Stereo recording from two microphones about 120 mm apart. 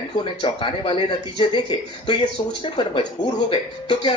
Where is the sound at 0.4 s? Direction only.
45° left (ahead or behind).